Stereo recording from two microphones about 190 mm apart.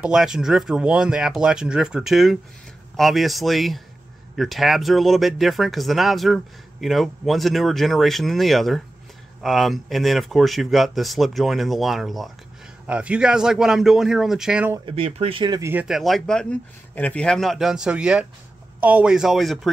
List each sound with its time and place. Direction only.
0.0 s speech: 5° right (ahead or behind)
14.9 s speech: 30° right (ahead or behind)
15.7 s speech: 5° right (ahead or behind)